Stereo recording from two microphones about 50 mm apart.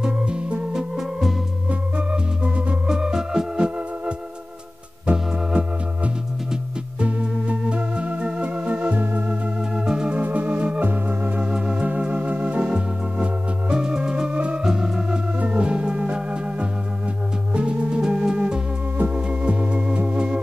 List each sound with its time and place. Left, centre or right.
0.0 s music: centre
1.7 s organ: right
2.9 s organ: centre
5.0 s organ: right
9.6 s organ: centre
10.1 s organ: right; by 14.3 s centre
14.3 s music: right
14.6 s music: centre
15.3 s organ: right
17.6 s music: centre